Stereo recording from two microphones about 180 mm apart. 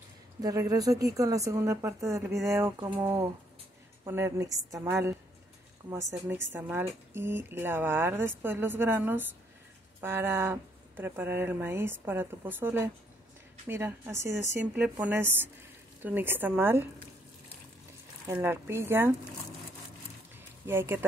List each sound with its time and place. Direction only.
0.4 s a woman's voice: 20° right (ahead or behind)
4.0 s speech: 15° right (ahead or behind)
6.5 s speech: 15° right (ahead or behind)
18.2 s speech: 15° right (ahead or behind)
20.6 s speech: 15° right (ahead or behind)